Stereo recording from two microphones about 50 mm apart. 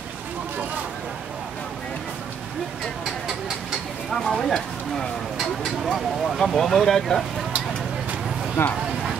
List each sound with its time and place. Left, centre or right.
4.1 s a sound: centre
6.4 s speech: centre
8.6 s speech: left